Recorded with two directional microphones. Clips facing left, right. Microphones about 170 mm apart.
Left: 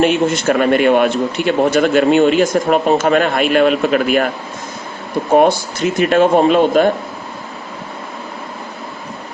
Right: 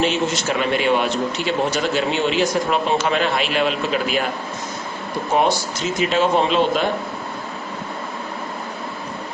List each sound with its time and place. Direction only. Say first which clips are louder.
0.0 s a man's voice: left 7 dB; 55° left (ahead or behind)
5.3 s a man's voice: left 7 dB; 50° left (ahead or behind)